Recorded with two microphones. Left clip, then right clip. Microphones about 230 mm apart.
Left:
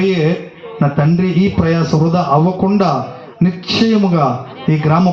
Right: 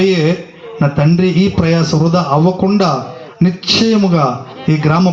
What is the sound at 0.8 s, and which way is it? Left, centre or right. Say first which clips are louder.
A man's voice: right 2 dB; right.